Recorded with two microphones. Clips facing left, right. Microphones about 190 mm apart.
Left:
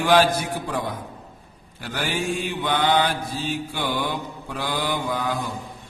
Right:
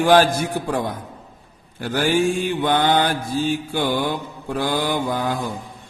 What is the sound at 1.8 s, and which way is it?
Mantra, 45° right (ahead or behind).